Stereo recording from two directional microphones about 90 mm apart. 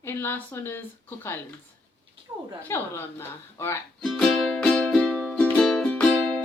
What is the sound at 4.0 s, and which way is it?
Music, 5° left (ahead or behind).